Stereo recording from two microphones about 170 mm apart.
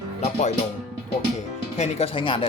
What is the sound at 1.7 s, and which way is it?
Speech, 40° left (ahead or behind).